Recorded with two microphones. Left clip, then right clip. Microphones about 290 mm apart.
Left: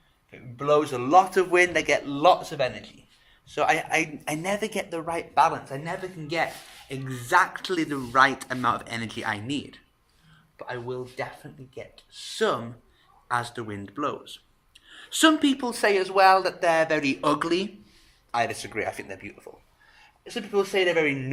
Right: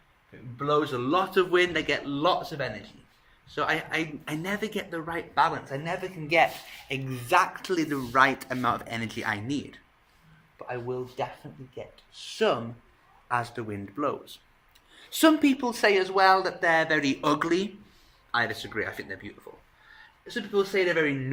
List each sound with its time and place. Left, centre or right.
0.6 s a man's voice: centre
18.7 s a man's voice: centre